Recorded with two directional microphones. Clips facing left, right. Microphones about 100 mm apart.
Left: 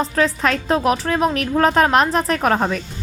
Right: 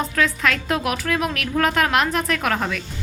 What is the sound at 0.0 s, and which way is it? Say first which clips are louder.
Speech: left 3 dB; 35° left (ahead or behind).